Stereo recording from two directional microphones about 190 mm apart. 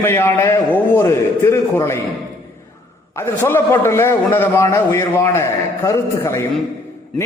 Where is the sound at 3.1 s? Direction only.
10° left (ahead or behind).